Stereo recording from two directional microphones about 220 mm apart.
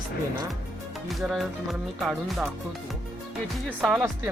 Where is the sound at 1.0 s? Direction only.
Centre (ahead or behind).